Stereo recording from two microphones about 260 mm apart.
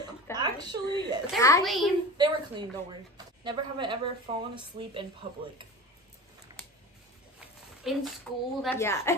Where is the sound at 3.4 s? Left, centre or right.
Centre.